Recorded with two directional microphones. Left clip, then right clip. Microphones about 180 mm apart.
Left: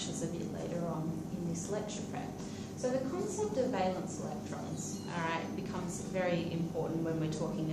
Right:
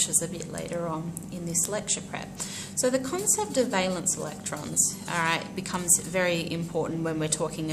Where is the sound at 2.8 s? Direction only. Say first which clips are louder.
Right 9 dB; 40° right (ahead or behind).